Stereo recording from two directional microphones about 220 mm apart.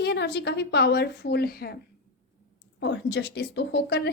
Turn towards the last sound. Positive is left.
turn(degrees=50)  # may be behind; listen again after turning